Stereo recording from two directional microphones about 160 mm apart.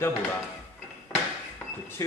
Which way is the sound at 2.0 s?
20° left (ahead or behind).